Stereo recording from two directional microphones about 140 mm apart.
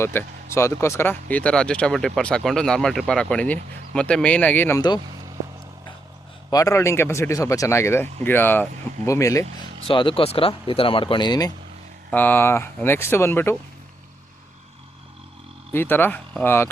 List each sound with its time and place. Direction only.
0.0 s speech: 15° left (ahead or behind)
6.5 s speech: 25° left (ahead or behind)
9.8 s speech: 35° left (ahead or behind)
12.1 s speech: 15° left (ahead or behind)
15.7 s speech: 15° left (ahead or behind)